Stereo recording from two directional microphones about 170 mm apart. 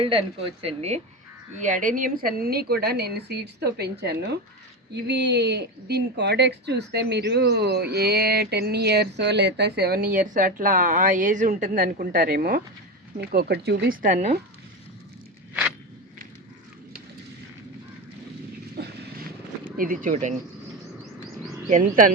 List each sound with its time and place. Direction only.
0.0 s a woman's voice: 35° right (ahead or behind); by 12.6 s 55° right (ahead or behind)
13.1 s speech: 70° right (ahead or behind); by 14.3 s 45° right (ahead or behind)
18.8 s vehicle: 75° right (ahead or behind)
19.7 s speech: 55° right (ahead or behind)
21.7 s speech: 50° right (ahead or behind)